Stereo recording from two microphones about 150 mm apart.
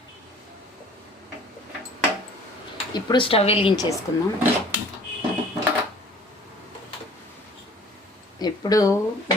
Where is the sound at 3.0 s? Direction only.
30° left (ahead or behind).